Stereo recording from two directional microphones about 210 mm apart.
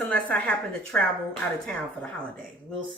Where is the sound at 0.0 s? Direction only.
5° left (ahead or behind).